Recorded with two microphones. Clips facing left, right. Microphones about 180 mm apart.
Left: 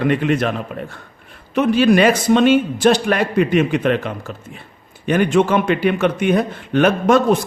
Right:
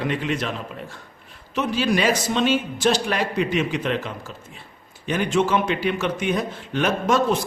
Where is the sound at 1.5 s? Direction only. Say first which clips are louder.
Left 8 dB; 60° left (ahead or behind).